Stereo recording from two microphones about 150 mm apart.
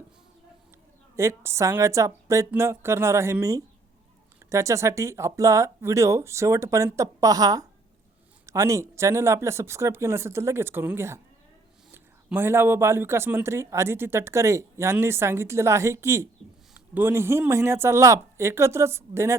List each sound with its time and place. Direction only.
1.1 s speech: 20° right (ahead or behind)
12.3 s speech: 15° right (ahead or behind)